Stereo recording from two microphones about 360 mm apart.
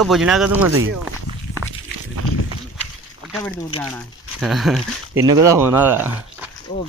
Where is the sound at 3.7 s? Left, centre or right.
Centre.